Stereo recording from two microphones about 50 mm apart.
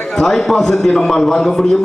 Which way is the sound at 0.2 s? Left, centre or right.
Centre.